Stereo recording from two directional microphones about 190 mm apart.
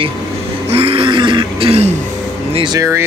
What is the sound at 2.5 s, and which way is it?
Speech, 25° right (ahead or behind).